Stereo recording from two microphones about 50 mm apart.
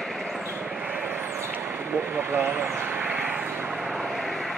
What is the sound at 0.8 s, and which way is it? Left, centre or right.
Vehicle, right.